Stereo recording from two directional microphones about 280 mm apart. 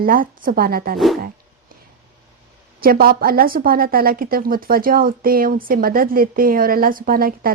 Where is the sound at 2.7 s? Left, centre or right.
Right.